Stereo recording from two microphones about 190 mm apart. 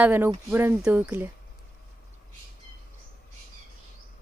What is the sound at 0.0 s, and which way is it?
Speech, 10° right (ahead or behind).